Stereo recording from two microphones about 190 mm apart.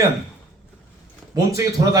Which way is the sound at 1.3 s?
15° right (ahead or behind).